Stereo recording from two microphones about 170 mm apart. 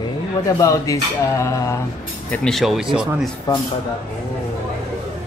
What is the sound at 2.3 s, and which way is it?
Speech, 5° left (ahead or behind).